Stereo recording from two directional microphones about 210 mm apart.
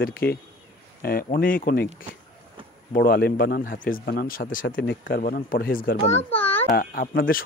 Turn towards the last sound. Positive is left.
turn(degrees=45)  # may be behind; listen again after turning